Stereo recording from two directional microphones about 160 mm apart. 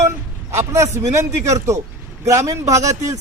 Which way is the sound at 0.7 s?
20° right (ahead or behind).